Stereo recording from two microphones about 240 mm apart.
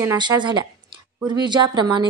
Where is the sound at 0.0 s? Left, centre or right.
Centre.